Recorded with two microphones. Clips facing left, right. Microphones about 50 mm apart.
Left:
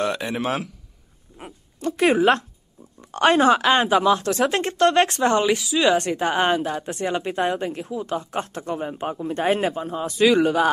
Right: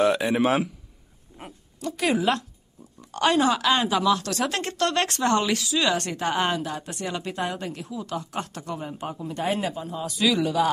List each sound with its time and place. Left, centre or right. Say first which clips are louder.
0.0 s a man's voice: right 3 dB; centre
1.8 s speech: left 6 dB; left